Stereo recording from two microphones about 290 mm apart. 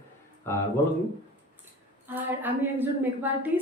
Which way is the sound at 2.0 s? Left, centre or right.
Centre.